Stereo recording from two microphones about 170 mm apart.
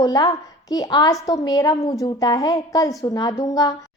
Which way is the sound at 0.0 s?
20° left (ahead or behind).